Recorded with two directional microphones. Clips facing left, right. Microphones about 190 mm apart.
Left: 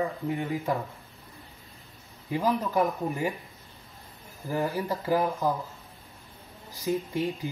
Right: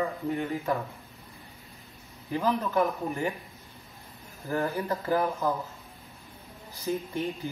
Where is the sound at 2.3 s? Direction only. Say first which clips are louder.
Left 1 dB; 15° left (ahead or behind).